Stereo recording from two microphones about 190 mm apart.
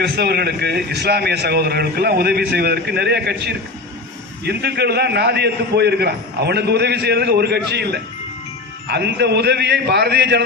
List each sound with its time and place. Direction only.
0.0 s a man's voice: 60° right (ahead or behind)